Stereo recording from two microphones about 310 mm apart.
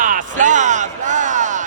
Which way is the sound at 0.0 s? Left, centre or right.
Right.